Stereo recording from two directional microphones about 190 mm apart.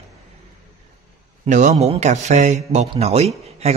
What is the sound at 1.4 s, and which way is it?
A man's voice, 40° right (ahead or behind).